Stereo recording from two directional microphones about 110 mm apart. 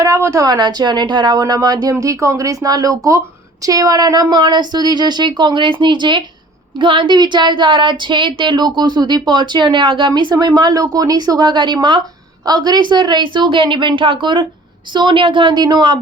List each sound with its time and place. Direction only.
0.0 s a woman's voice: 30° right (ahead or behind)